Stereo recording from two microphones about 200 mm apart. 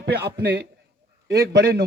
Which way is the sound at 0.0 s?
55° right (ahead or behind).